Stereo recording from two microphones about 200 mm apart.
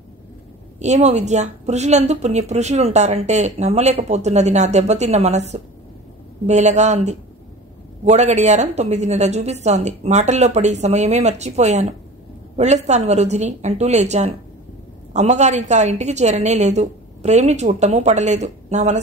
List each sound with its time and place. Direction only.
0.7 s speech: 35° right (ahead or behind)